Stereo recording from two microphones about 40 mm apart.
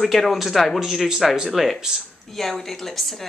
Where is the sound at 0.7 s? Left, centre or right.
Centre.